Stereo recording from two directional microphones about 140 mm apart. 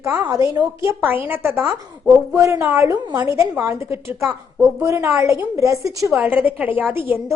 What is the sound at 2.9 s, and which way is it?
Speech, 35° right (ahead or behind).